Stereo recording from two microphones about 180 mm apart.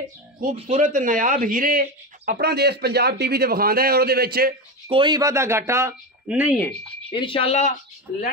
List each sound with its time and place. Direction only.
0.4 s speech: 50° right (ahead or behind)
4.8 s speech: 25° right (ahead or behind); by 6.6 s 10° right (ahead or behind)
6.6 s speech: 5° left (ahead or behind)
7.1 s speech: 30° left (ahead or behind)